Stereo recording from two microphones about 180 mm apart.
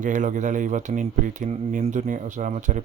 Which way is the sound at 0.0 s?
45° right (ahead or behind).